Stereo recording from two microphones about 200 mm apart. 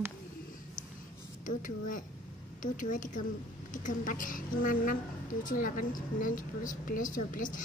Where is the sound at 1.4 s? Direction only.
40° left (ahead or behind).